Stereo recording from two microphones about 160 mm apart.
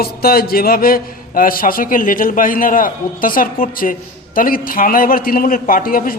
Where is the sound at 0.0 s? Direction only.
70° left (ahead or behind).